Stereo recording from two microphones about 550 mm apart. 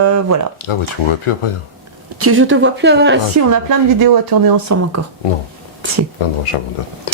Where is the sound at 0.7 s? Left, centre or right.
Left.